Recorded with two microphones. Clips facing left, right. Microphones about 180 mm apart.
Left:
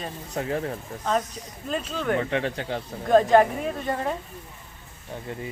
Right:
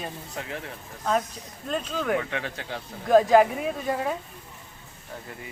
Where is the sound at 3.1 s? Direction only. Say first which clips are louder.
Even; 5° right (ahead or behind).